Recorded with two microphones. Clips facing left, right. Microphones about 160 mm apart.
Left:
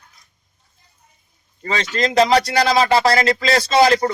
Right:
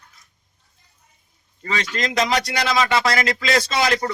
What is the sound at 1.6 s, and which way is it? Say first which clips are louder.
Speech: left 4 dB; 30° left (ahead or behind).